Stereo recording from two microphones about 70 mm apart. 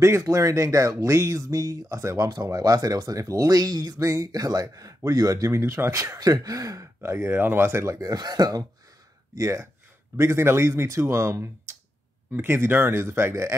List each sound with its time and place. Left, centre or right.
0.0 s speech: right
2.2 s speech: right
4.0 s speech: right
4.3 s speech: right
5.6 s speech: right
6.1 s speech: right
7.2 s a man's voice: right
8.2 s speech: right
9.3 s a man's voice: right